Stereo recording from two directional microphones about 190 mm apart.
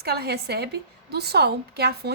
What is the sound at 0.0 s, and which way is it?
A woman's voice, 55° right (ahead or behind).